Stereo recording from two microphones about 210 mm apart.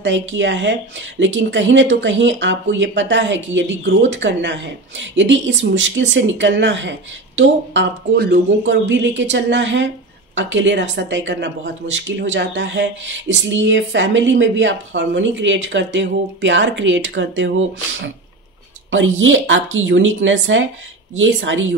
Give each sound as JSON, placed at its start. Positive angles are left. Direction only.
{"t": 0.0, "sound": "speech", "side_deg": -60}